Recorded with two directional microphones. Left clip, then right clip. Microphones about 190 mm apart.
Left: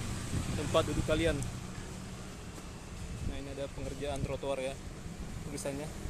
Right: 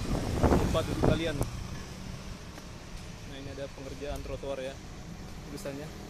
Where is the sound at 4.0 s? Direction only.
15° left (ahead or behind).